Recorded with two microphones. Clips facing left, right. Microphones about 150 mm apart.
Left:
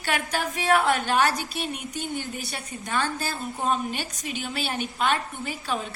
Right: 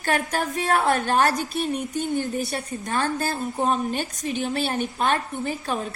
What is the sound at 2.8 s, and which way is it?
Speech, 45° right (ahead or behind).